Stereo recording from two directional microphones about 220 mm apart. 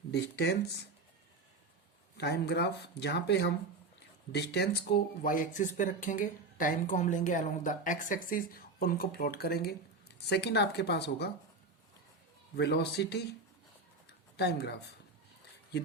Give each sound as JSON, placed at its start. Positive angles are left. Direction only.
{"t": 0.1, "sound": "speech", "side_deg": 50}
{"t": 2.1, "sound": "speech", "side_deg": 50}
{"t": 12.5, "sound": "speech", "side_deg": 50}
{"t": 14.1, "sound": "a sound", "side_deg": 50}